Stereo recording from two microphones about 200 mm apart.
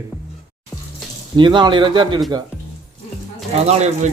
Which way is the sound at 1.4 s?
25° right (ahead or behind).